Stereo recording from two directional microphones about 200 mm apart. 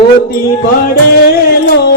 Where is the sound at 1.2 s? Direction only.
55° left (ahead or behind).